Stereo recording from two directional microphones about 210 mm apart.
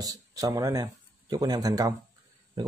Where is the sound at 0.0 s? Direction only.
15° right (ahead or behind).